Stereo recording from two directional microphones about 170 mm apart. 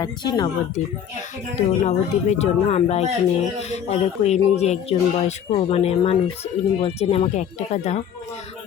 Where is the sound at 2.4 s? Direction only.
40° left (ahead or behind).